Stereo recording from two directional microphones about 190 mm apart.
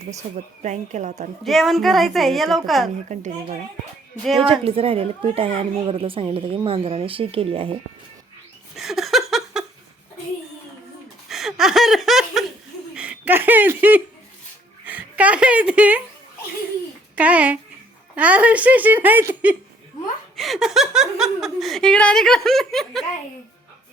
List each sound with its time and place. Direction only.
0.3 s speech: 40° right (ahead or behind)
1.5 s speech: centre (ahead or behind)
3.1 s speech: 40° right (ahead or behind)
4.4 s speech: 30° right (ahead or behind)
8.7 s laughter: centre (ahead or behind)
11.3 s laughter: centre (ahead or behind)
12.9 s chuckle: 5° right (ahead or behind)
14.8 s speech: 5° right (ahead or behind)
17.2 s speech: 5° right (ahead or behind)